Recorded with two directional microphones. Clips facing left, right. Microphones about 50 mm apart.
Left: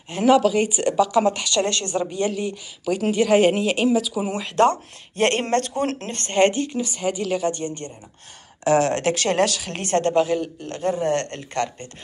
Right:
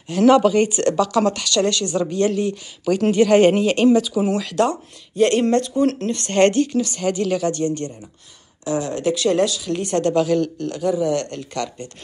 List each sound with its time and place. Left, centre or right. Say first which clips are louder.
0.4 s speech: right 3 dB; centre; by 1.7 s left
1.7 s speech: right 4 dB; left
2.0 s speech: right 5 dB; centre
4.3 s a woman's voice: right 5 dB; left
4.6 s speech: left 2 dB; left
6.3 s speech: right 3 dB; centre
7.4 s a woman's voice: right 4 dB; left
8.6 s speech: left 3 dB; left
9.9 s a woman's voice: right 1 dB; left
10.7 s speech: even; left